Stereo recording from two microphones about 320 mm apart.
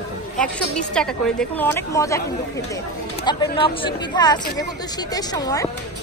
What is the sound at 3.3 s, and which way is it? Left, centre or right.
A woman's voice, centre.